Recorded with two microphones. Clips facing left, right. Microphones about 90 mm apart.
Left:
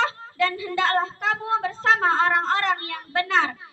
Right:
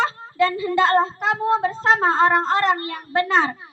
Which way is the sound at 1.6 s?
30° right (ahead or behind).